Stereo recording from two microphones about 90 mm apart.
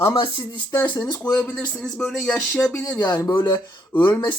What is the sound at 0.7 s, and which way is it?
Speech, 25° left (ahead or behind).